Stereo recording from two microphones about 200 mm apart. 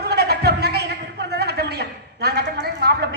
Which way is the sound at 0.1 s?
55° right (ahead or behind).